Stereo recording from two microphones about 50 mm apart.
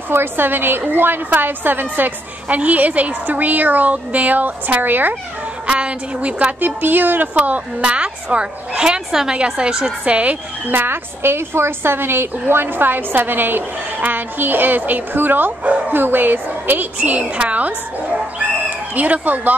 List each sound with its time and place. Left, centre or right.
0.1 s a woman's voice: right
5.7 s a woman's voice: right
6.6 s a woman's voice: right
7.8 s a woman's voice: right
10.0 s a woman's voice: right
10.7 s a woman's voice: right
18.9 s a woman's voice: right